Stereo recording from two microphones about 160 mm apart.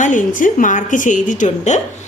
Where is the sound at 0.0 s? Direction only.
55° left (ahead or behind).